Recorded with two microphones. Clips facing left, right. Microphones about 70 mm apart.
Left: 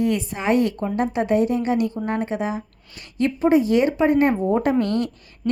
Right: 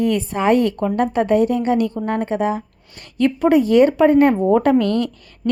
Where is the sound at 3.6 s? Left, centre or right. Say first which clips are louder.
Right 5 dB; right.